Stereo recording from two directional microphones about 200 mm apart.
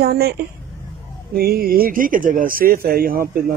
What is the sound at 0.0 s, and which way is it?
Speech, 50° right (ahead or behind).